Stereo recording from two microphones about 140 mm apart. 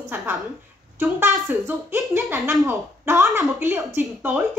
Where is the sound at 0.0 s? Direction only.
15° right (ahead or behind).